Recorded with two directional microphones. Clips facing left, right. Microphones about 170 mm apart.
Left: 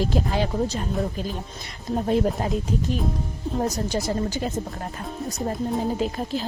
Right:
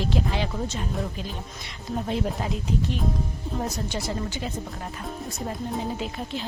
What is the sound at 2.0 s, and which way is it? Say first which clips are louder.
Speech: left 6 dB; 45° left (ahead or behind).